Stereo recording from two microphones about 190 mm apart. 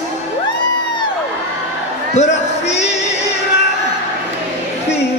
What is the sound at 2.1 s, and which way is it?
Speech, 35° left (ahead or behind).